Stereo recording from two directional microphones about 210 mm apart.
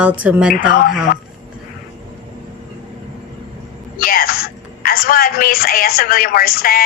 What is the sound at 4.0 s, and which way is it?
Speech, 45° left (ahead or behind).